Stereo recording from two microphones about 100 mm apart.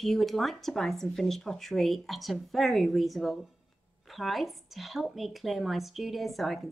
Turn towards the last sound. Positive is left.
turn(degrees=0)  # may be behind; listen again after turning